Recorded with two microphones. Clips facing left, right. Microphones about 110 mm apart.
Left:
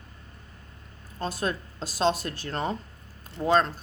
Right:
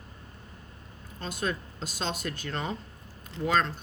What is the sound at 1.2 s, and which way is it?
Speech, 40° left (ahead or behind).